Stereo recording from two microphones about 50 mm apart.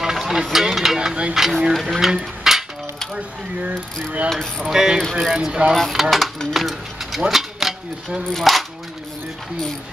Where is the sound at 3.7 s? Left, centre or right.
Right.